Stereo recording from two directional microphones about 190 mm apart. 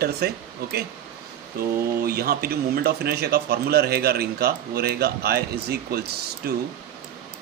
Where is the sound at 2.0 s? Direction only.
55° right (ahead or behind).